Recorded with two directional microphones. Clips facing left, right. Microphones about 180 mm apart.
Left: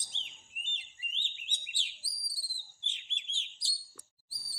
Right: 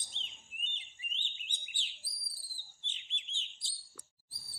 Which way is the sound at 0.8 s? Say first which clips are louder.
Left 1 dB; 90° left.